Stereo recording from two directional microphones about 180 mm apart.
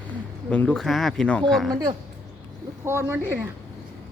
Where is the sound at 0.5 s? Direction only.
5° left (ahead or behind).